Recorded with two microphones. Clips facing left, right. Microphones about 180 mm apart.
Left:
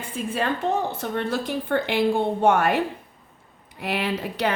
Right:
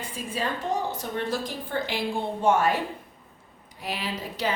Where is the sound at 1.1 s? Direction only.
60° left (ahead or behind).